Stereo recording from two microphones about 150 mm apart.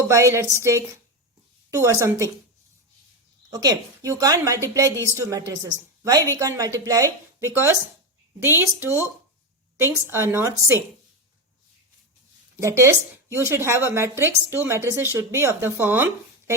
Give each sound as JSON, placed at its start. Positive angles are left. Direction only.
{"t": 0.1, "sound": "a woman's voice", "side_deg": -20}
{"t": 3.5, "sound": "a woman's voice", "side_deg": -25}
{"t": 12.5, "sound": "a woman's voice", "side_deg": -20}